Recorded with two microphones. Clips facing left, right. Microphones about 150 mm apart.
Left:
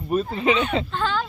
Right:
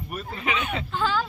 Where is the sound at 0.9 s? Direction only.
5° right (ahead or behind).